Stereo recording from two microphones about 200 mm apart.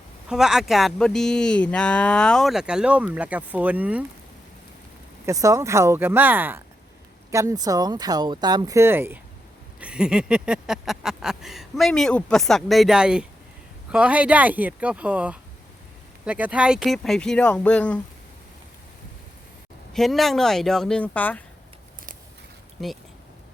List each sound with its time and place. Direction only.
0.3 s speech: centre (ahead or behind)
5.2 s speech: 15° right (ahead or behind); by 18.0 s 5° left (ahead or behind)
19.9 s speech: centre (ahead or behind)